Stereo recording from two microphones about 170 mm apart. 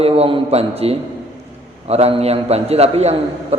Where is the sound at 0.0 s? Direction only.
35° right (ahead or behind).